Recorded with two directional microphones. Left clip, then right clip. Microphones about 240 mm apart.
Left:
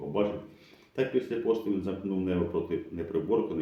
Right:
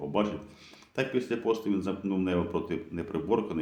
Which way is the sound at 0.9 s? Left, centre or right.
Right.